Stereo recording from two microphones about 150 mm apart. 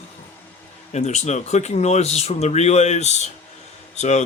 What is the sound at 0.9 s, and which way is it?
Speech, 50° left (ahead or behind).